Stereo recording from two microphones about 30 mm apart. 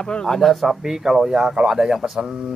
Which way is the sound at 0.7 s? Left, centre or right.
Centre.